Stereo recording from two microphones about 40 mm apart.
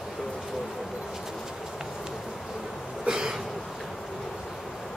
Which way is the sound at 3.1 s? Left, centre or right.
Centre.